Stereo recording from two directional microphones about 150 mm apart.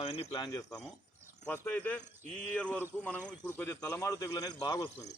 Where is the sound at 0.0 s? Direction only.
40° left (ahead or behind).